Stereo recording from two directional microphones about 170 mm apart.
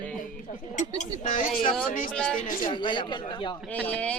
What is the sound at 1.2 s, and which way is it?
Speech, 50° left (ahead or behind).